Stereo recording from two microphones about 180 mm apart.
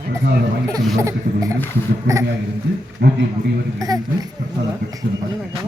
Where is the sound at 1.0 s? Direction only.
20° right (ahead or behind).